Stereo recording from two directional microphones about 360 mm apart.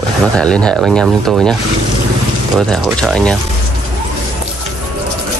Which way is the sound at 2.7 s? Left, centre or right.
Centre.